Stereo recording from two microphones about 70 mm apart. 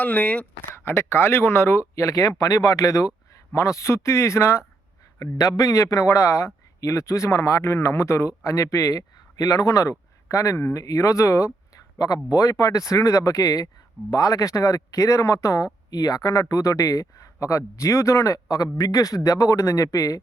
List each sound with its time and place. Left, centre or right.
0.0 s speech: left
0.9 s speech: left
2.0 s speech: left
2.4 s speech: left
5.2 s speech: left
18.4 s speech: left